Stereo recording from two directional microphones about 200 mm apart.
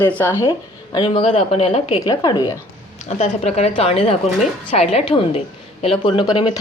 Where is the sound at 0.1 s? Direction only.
10° left (ahead or behind).